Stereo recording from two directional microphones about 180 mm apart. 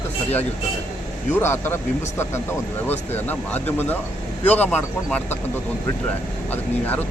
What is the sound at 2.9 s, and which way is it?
Speech, 10° left (ahead or behind).